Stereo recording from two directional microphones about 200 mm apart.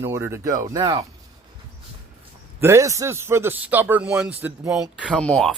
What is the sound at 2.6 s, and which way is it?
A man's voice, 15° right (ahead or behind).